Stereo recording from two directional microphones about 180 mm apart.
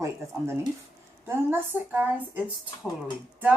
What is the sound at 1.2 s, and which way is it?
Speech, 15° right (ahead or behind).